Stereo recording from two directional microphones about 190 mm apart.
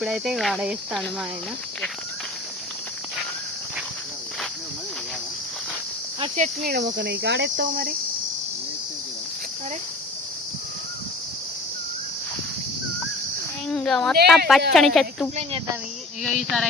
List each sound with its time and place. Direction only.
0.0 s speech: centre (ahead or behind)
6.3 s speech: 40° right (ahead or behind)
6.7 s speech: 65° right (ahead or behind)
7.5 s cricket: 50° right (ahead or behind)
13.7 s speech: 5° left (ahead or behind)